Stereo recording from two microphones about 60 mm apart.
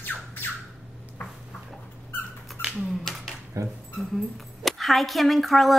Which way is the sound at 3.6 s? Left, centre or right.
Right.